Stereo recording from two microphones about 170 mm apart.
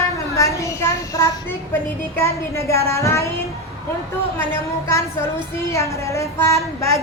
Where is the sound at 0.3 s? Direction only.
20° left (ahead or behind).